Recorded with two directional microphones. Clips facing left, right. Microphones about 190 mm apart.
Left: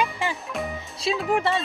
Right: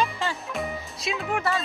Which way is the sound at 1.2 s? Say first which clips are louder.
Left 4 dB; 35° left (ahead or behind).